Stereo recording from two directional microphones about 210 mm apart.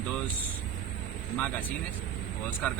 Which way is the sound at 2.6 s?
5° left (ahead or behind).